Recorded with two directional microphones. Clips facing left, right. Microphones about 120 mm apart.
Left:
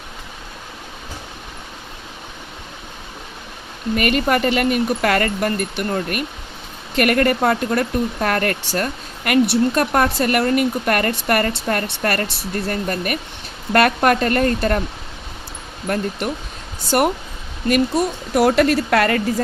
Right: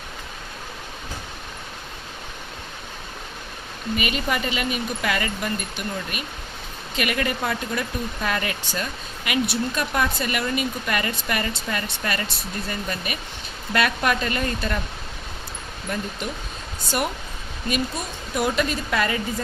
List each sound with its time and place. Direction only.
3.9 s speech: 65° left (ahead or behind)
15.9 s speech: 70° left (ahead or behind)